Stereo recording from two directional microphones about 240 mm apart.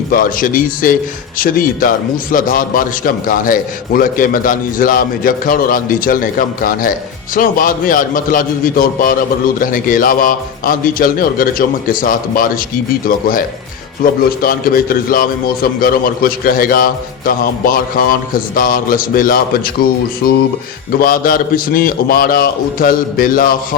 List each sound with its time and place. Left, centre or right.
0.1 s a man's voice: left